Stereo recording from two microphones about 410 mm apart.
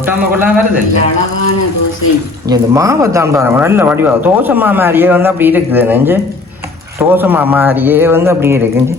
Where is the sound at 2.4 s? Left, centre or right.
Centre.